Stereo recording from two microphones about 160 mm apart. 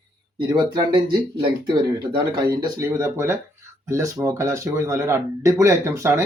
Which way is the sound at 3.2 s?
15° right (ahead or behind).